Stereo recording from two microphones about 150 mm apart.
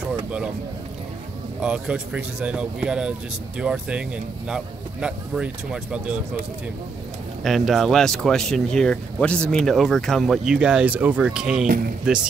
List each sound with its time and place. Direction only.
1.6 s speech: 5° right (ahead or behind)
7.4 s speech: centre (ahead or behind)